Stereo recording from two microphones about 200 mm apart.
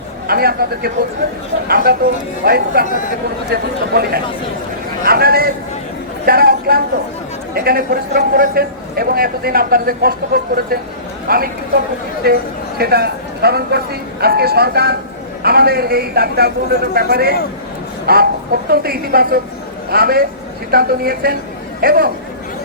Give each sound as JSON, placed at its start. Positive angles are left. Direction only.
{"t": 0.3, "sound": "a man's voice", "side_deg": -50}
{"t": 6.2, "sound": "a sound", "side_deg": -50}
{"t": 7.5, "sound": "a man's voice", "side_deg": -50}